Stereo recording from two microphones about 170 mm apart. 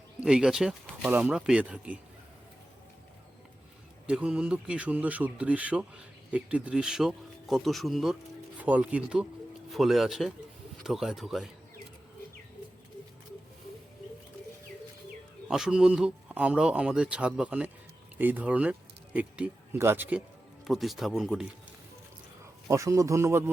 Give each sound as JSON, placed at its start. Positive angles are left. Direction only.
{"t": 0.2, "sound": "speech", "side_deg": -5}
{"t": 4.0, "sound": "speech", "side_deg": -5}
{"t": 15.4, "sound": "speech", "side_deg": -5}
{"t": 22.7, "sound": "speech", "side_deg": -20}